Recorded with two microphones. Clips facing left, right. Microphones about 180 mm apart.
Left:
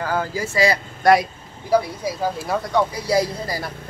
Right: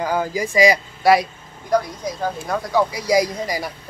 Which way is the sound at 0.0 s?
15° right (ahead or behind).